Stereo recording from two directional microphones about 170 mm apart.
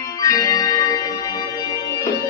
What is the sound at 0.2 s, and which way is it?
Music, 20° left (ahead or behind).